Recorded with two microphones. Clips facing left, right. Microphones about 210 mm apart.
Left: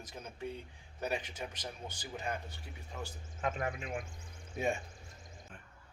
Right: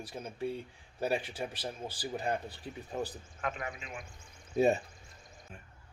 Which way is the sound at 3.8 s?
55° left (ahead or behind).